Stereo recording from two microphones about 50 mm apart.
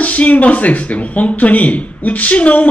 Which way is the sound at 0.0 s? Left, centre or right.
Left.